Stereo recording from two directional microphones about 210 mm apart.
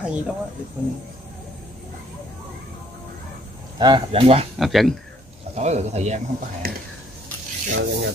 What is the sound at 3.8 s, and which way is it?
Speech, 25° right (ahead or behind).